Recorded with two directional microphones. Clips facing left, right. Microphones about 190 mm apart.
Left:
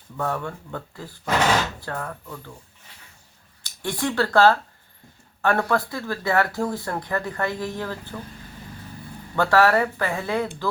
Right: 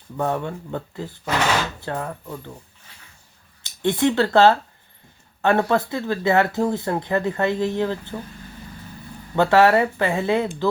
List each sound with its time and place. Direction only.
0.2 s speech: 20° right (ahead or behind)
3.6 s speech: 20° right (ahead or behind)
9.3 s speech: 20° right (ahead or behind)